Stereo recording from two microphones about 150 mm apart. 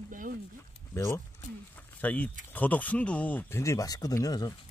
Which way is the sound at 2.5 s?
10° left (ahead or behind).